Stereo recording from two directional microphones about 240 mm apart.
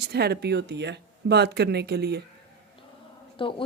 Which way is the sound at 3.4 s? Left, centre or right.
Left.